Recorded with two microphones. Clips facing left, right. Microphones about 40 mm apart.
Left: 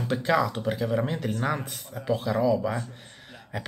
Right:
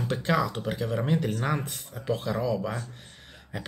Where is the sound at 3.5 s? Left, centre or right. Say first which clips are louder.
Left 2 dB; centre.